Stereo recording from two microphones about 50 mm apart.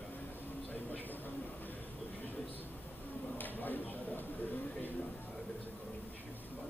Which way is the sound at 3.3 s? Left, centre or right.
Left.